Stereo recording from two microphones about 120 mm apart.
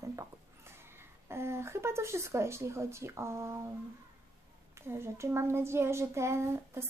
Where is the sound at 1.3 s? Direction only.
20° right (ahead or behind).